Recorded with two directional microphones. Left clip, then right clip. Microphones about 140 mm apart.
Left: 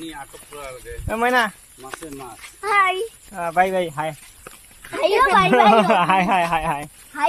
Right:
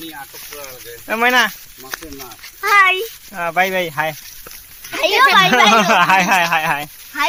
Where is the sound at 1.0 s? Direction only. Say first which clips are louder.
Right 5 dB; 45° right (ahead or behind).